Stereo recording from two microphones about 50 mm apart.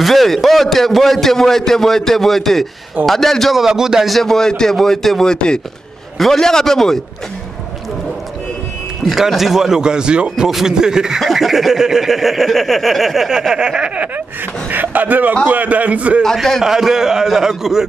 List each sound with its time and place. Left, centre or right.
0.0 s a man's voice: centre
3.5 s speech: centre
4.1 s a man's voice: centre
9.4 s speech: centre
14.7 s a man's voice: right
16.6 s speech: centre